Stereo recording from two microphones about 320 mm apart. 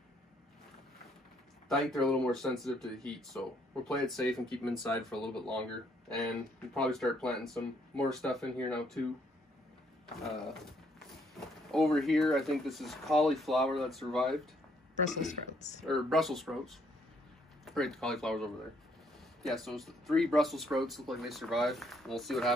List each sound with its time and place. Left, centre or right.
1.7 s speech: centre
10.2 s speech: centre
15.0 s speech: left
15.8 s speech: centre